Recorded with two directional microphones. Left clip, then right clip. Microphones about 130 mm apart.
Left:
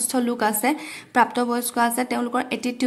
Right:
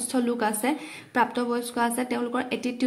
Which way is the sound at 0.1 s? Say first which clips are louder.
Left 3 dB; 25° left (ahead or behind).